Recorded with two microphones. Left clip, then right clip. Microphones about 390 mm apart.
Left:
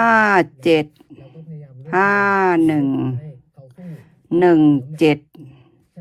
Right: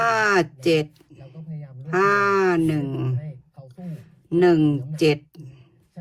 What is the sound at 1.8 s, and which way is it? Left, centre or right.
Speech, centre.